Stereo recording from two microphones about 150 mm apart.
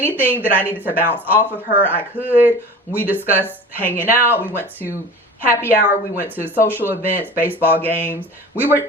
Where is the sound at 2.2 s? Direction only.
10° left (ahead or behind).